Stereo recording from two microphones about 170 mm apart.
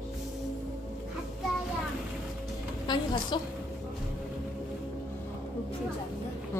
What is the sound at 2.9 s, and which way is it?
Speech, 25° left (ahead or behind).